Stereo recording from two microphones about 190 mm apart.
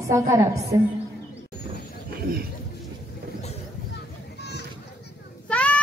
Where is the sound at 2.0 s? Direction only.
50° right (ahead or behind).